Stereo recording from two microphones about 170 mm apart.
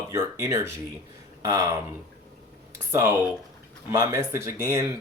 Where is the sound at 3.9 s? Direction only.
20° right (ahead or behind).